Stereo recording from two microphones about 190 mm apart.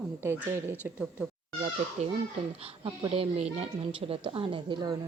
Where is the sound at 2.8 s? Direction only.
25° right (ahead or behind).